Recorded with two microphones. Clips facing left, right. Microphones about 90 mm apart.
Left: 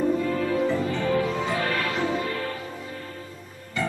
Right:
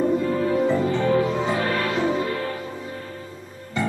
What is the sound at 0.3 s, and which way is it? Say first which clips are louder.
Music: right 3 dB; 25° right (ahead or behind).